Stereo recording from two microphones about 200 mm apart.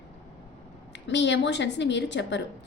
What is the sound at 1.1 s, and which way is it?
A woman's voice, 60° left (ahead or behind).